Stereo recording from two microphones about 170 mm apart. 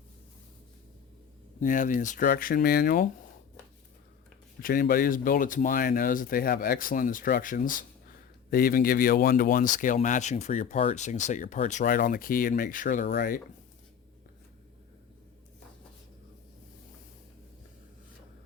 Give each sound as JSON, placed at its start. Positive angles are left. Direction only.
{"t": 1.6, "sound": "speech", "side_deg": 50}
{"t": 4.6, "sound": "speech", "side_deg": 55}
{"t": 13.1, "sound": "speech", "side_deg": 70}